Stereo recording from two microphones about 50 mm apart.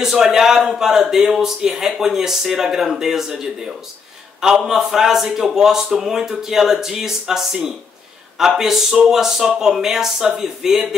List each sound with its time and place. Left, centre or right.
0.0 s speech: centre